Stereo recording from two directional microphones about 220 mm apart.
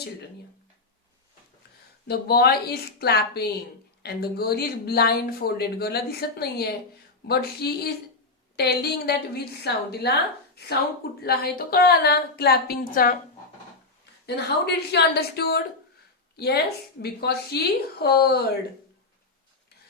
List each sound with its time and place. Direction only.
2.0 s speech: 45° left (ahead or behind)
14.3 s speech: 50° left (ahead or behind)